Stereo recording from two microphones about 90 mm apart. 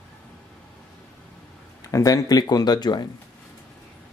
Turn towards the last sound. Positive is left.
turn(degrees=50)  # may be behind; listen again after turning